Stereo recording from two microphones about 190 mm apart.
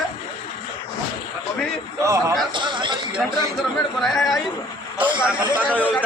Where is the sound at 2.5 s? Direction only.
25° right (ahead or behind).